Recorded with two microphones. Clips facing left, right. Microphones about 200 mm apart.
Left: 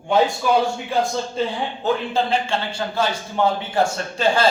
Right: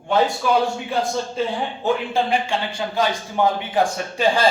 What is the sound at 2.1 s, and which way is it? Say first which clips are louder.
A man's voice: even; 15° right (ahead or behind).